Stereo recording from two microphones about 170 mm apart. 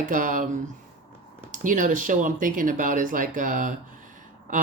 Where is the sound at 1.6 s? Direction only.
50° right (ahead or behind).